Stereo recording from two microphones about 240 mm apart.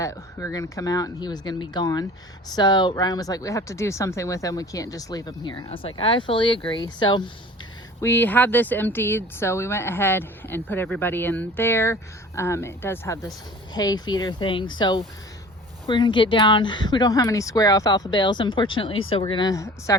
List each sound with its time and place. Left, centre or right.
0.0 s speech: centre